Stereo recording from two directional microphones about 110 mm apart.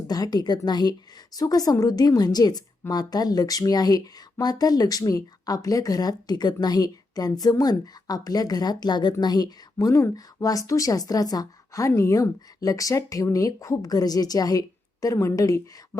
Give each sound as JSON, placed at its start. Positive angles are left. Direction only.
{"t": 0.1, "sound": "a woman's voice", "side_deg": 35}